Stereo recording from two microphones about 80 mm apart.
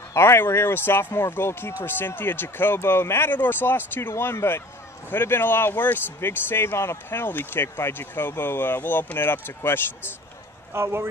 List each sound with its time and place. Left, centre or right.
0.1 s speech: left
10.7 s speech: right